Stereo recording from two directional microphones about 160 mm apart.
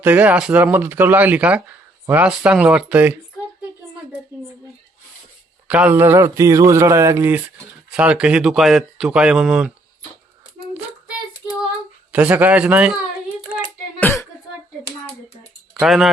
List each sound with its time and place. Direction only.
0.0 s speech: 10° right (ahead or behind)
5.6 s speech: 10° right (ahead or behind)
12.1 s speech: 10° right (ahead or behind)
14.0 s a sound: 15° left (ahead or behind)
15.7 s speech: centre (ahead or behind)